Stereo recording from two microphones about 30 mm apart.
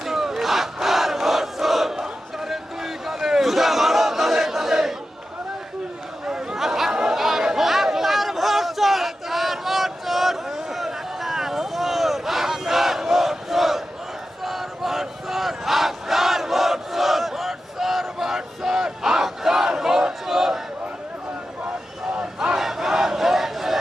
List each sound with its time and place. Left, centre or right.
0.0 s crowd: centre
6.2 s a sound: right
6.6 s chatter: centre
7.4 s a sound: centre
14.4 s battle cry: centre
18.2 s a sound: centre
18.9 s battle cry: centre
20.2 s crowd: centre
22.5 s crowd: centre